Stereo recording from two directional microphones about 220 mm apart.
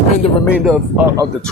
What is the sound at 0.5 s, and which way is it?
Speech, 5° right (ahead or behind).